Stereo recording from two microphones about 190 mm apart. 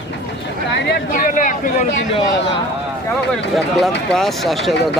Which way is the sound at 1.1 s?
45° left (ahead or behind).